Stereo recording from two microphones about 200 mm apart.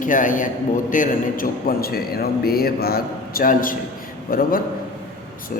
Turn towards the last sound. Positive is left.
turn(degrees=45)  # may be behind; listen again after turning